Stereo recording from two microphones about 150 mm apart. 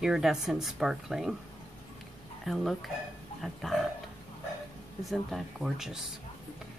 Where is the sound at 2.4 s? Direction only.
Centre (ahead or behind).